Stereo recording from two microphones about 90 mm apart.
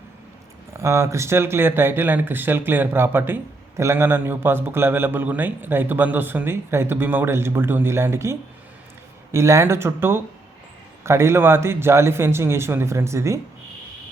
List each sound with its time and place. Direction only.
0.7 s speech: 30° right (ahead or behind)